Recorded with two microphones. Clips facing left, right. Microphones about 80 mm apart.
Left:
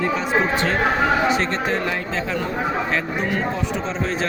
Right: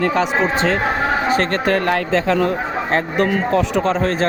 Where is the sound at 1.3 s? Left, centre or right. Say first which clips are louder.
Right 4 dB; right.